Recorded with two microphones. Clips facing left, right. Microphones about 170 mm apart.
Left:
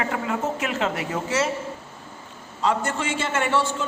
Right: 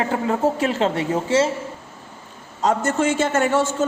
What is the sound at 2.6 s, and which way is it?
A man's voice, 45° right (ahead or behind).